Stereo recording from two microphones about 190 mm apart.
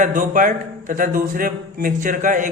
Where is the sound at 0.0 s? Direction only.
45° right (ahead or behind).